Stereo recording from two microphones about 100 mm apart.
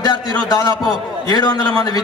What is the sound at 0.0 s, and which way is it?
A man's voice, 40° left (ahead or behind).